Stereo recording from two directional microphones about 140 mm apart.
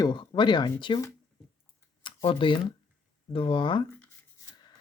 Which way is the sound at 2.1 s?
35° left (ahead or behind).